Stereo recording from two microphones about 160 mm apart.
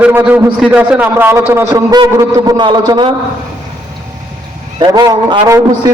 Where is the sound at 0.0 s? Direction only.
10° right (ahead or behind); by 3.1 s 25° right (ahead or behind).